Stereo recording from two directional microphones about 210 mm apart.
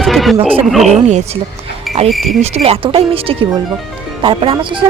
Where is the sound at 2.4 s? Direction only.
30° right (ahead or behind).